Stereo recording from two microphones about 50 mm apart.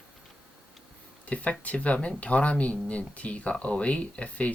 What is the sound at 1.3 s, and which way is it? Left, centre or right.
Speech, left.